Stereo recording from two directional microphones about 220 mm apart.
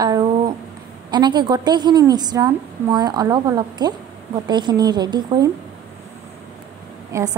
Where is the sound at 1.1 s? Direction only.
20° right (ahead or behind).